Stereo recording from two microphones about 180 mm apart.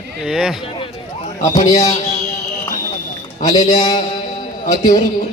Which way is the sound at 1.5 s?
40° left (ahead or behind).